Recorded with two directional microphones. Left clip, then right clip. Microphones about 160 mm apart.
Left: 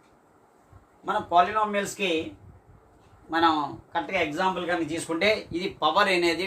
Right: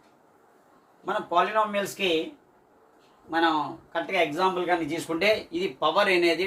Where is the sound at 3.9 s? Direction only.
15° left (ahead or behind).